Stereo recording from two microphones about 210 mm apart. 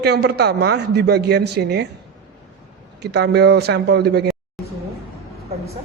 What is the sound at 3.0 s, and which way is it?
A man's voice, 50° right (ahead or behind).